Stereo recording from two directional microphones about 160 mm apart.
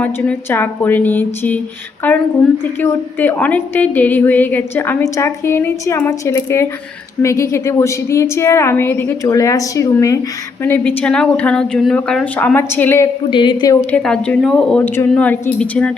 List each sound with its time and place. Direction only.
0.0 s a woman's voice: 10° left (ahead or behind)
13.3 s a woman's voice: 30° left (ahead or behind)
13.9 s a woman's voice: 5° left (ahead or behind)